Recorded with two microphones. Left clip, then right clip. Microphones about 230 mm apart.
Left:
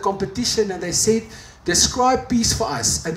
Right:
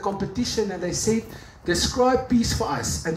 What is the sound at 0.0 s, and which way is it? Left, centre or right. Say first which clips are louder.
Speech: left 5 dB; left.